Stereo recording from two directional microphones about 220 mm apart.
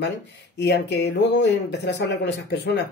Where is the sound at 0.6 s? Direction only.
50° left (ahead or behind).